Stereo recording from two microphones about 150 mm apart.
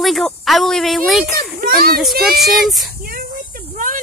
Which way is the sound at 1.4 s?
85° right.